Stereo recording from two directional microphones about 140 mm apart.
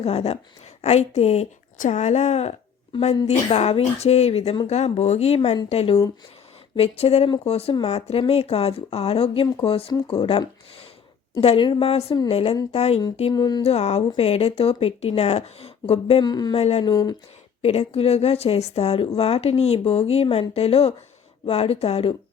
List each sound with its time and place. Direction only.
0.0 s a woman's voice: 50° left (ahead or behind)
13.3 s a sound: 30° left (ahead or behind)
13.6 s a woman's voice: 50° left (ahead or behind)
16.2 s speech: 30° left (ahead or behind)
16.6 s a woman's voice: 45° left (ahead or behind)
16.9 s a sound: 25° left (ahead or behind)
17.6 s a woman's voice: 45° left (ahead or behind)